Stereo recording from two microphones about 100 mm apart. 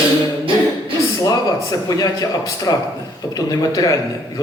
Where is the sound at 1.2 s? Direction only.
35° left (ahead or behind).